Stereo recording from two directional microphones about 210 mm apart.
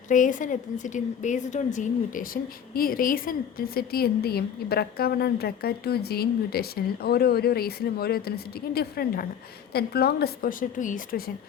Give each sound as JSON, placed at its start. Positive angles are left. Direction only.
{"t": 0.1, "sound": "a woman's voice", "side_deg": 40}